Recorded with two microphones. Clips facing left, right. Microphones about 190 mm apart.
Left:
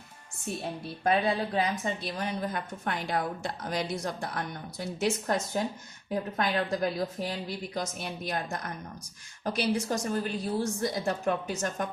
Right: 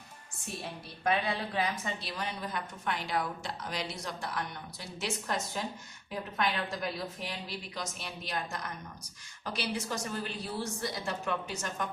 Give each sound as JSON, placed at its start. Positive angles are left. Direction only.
{"t": 1.5, "sound": "a woman's voice", "side_deg": 45}